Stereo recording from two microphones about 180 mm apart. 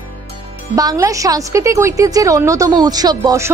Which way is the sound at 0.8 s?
20° right (ahead or behind).